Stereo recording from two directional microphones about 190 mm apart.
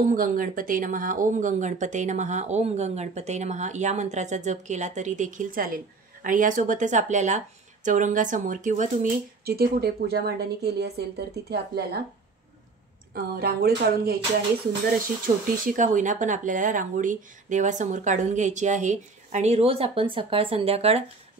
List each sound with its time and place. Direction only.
0.0 s speech: 45° right (ahead or behind)
9.4 s a woman's voice: 55° right (ahead or behind)
13.1 s speech: 55° right (ahead or behind); by 21.0 s 30° right (ahead or behind)